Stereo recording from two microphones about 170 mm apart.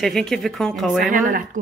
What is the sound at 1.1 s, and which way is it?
Speech, 50° right (ahead or behind).